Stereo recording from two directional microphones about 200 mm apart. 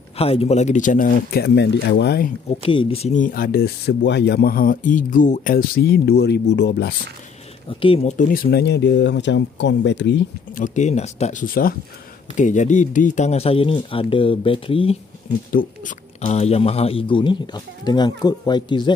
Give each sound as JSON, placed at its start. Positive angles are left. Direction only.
{"t": 0.2, "sound": "speech", "side_deg": 30}
{"t": 2.6, "sound": "speech", "side_deg": 25}
{"t": 7.8, "sound": "speech", "side_deg": 30}
{"t": 10.5, "sound": "speech", "side_deg": 40}
{"t": 16.2, "sound": "speech", "side_deg": 35}